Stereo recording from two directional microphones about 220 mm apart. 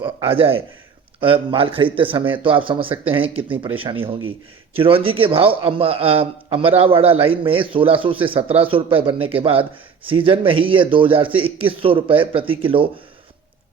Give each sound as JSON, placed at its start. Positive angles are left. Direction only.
{"t": 0.0, "sound": "a man's voice", "side_deg": -25}